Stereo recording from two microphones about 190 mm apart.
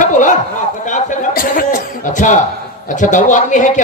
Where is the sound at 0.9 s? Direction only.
40° left (ahead or behind).